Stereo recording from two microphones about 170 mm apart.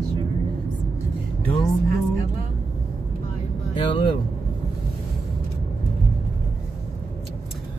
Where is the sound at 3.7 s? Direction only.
30° left (ahead or behind).